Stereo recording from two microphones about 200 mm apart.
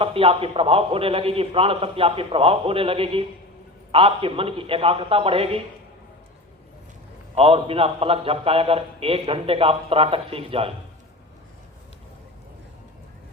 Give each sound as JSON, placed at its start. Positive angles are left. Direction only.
{"t": 0.0, "sound": "a man's voice", "side_deg": -30}
{"t": 7.3, "sound": "a man's voice", "side_deg": -30}